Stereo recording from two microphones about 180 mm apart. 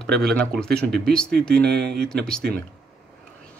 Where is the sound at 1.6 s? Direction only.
65° right (ahead or behind).